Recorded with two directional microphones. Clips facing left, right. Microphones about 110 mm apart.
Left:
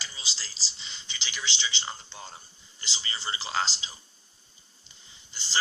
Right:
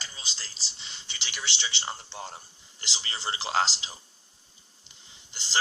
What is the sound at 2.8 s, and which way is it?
A man's voice, 85° right.